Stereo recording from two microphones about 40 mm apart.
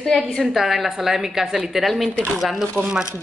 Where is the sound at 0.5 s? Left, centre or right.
Centre.